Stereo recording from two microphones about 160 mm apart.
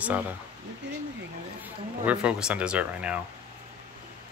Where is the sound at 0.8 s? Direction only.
90° right.